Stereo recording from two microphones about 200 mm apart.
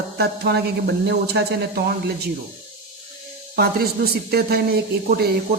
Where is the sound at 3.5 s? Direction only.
50° right (ahead or behind).